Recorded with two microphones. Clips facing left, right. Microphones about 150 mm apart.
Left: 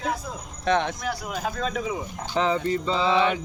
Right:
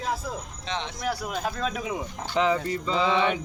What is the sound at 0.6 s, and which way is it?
Speech, 55° left (ahead or behind).